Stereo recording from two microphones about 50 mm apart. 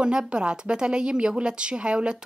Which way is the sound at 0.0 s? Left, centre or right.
Centre.